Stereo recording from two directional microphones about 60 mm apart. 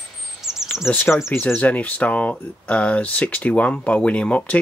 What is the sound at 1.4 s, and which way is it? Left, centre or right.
Speech, left.